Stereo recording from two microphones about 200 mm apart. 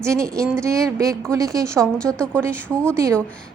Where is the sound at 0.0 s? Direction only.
15° right (ahead or behind).